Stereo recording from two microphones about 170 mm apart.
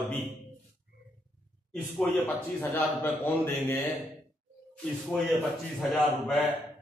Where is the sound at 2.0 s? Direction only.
10° left (ahead or behind).